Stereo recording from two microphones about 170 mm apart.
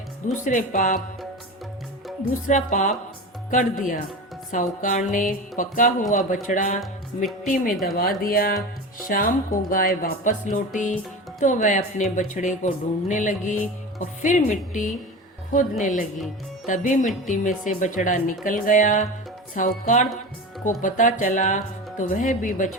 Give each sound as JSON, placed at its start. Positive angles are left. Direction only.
{"t": 0.3, "sound": "speech", "side_deg": 50}
{"t": 2.5, "sound": "speech", "side_deg": 45}